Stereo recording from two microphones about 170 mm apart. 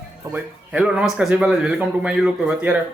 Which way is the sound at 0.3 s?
5° right (ahead or behind).